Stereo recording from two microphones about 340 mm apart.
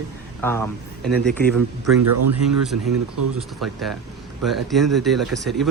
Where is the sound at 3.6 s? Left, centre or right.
Centre.